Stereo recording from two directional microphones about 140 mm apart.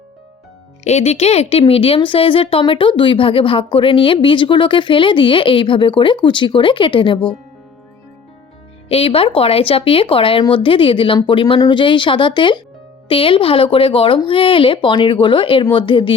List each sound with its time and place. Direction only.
0.9 s speech: 50° left (ahead or behind)
8.9 s speech: 40° left (ahead or behind)